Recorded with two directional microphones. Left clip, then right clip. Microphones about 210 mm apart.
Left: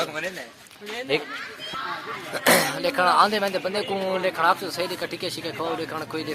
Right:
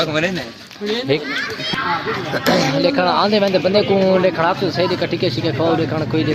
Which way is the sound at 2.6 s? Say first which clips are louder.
Right 6 dB; 15° left (ahead or behind).